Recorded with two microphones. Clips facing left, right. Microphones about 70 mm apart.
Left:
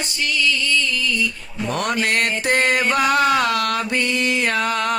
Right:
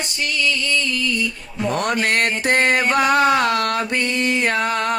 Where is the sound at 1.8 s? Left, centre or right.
Right.